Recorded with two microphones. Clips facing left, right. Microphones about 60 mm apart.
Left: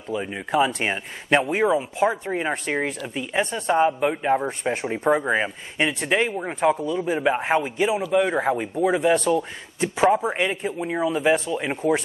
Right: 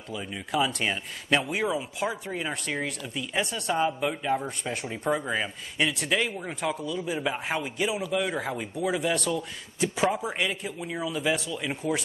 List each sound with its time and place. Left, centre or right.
0.1 s speech: left